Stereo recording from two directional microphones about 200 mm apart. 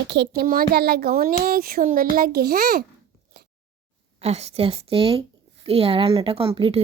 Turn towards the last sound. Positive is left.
turn(degrees=-30)  # may be behind; listen again after turning